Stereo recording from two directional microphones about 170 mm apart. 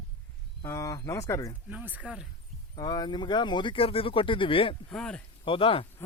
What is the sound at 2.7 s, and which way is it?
Speech, 25° left (ahead or behind).